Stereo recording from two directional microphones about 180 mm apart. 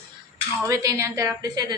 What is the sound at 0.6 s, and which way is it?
Cutlery, 20° right (ahead or behind).